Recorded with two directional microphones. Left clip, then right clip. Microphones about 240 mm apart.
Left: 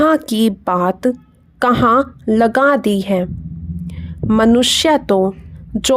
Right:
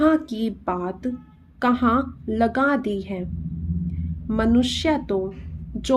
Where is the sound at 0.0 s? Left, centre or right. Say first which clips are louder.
Left 7 dB; left.